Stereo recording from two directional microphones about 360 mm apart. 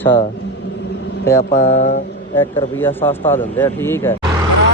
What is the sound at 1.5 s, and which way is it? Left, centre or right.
Mantra, left.